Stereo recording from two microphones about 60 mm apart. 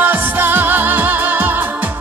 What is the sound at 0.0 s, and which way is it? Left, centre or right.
Music, right.